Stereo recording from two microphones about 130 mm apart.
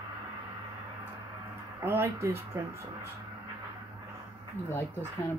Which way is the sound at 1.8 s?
20° right (ahead or behind).